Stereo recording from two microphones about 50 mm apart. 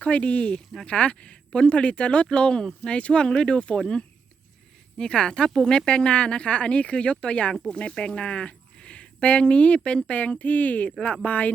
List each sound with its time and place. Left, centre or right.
0.0 s speech: left